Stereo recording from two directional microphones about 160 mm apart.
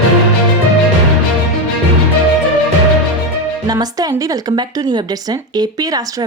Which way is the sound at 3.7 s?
25° right (ahead or behind).